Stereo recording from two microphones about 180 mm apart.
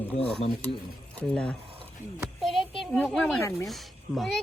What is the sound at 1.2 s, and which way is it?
Speech, 5° left (ahead or behind).